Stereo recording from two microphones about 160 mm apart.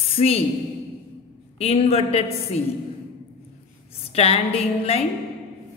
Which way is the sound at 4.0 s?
40° left (ahead or behind).